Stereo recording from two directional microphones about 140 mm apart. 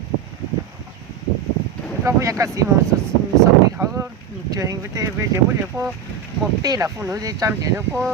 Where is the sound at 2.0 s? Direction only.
20° right (ahead or behind).